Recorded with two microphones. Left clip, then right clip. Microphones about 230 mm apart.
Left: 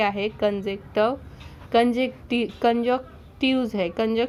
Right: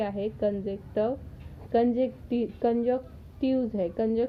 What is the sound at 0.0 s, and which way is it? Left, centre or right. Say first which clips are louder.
Speech: left 6 dB; left.